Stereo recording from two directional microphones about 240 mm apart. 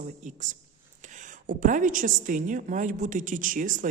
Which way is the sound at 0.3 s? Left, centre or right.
Right.